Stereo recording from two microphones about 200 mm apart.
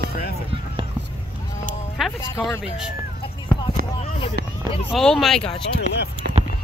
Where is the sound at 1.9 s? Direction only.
Centre (ahead or behind).